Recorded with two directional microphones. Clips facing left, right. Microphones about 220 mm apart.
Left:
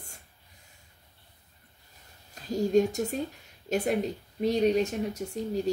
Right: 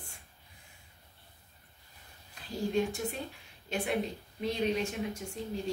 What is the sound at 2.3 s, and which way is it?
Speech, 45° left (ahead or behind).